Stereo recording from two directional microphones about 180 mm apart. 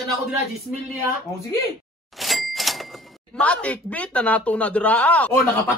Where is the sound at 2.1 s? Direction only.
Centre (ahead or behind).